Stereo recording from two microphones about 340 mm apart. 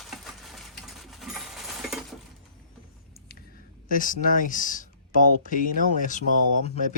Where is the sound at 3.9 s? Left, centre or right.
Left.